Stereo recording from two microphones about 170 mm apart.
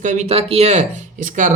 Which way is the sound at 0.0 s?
45° right (ahead or behind).